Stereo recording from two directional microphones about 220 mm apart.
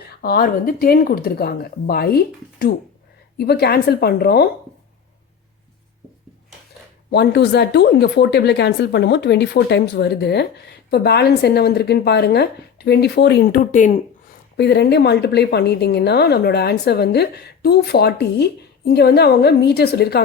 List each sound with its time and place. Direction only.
0.1 s speech: 45° left (ahead or behind)
7.1 s speech: 50° left (ahead or behind)
14.5 s speech: 50° left (ahead or behind)